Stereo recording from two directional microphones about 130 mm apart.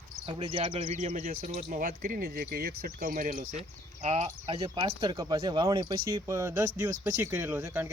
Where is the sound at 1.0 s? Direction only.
60° right (ahead or behind); by 3.4 s 90° right.